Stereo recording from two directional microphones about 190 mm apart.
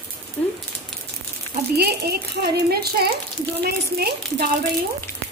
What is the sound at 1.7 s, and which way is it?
Speech, 55° right (ahead or behind).